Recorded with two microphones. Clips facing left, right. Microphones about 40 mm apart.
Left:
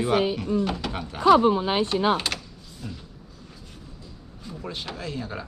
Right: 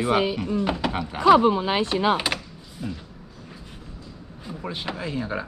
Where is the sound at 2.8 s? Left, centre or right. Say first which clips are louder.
Right 6 dB; centre.